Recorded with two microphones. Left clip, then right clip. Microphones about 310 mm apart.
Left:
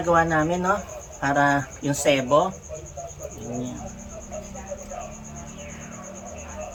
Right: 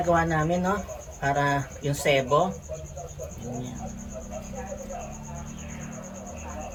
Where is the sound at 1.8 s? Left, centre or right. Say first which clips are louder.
Left 3 dB; centre.